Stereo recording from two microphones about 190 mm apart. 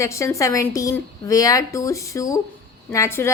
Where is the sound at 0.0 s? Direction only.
15° left (ahead or behind).